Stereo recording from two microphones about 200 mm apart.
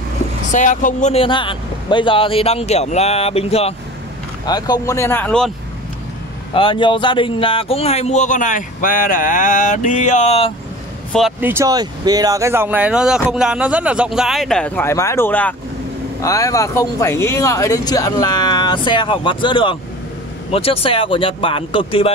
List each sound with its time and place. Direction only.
0.5 s speech: 40° left (ahead or behind)
4.5 s speech: 20° left (ahead or behind)
6.5 s speech: 25° left (ahead or behind)
11.4 s speech: 15° right (ahead or behind); by 22.1 s 25° left (ahead or behind)